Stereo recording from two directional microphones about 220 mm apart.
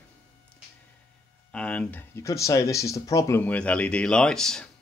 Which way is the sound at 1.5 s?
5° left (ahead or behind).